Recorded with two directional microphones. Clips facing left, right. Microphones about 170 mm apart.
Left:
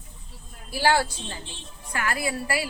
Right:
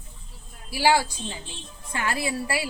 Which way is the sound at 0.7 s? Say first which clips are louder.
Right 1 dB; 10° right (ahead or behind).